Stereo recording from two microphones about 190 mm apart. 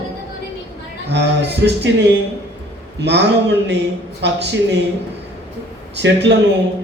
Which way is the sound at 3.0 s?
65° right (ahead or behind).